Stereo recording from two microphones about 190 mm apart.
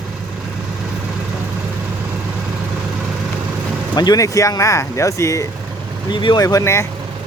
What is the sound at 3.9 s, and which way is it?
Speech, 20° left (ahead or behind).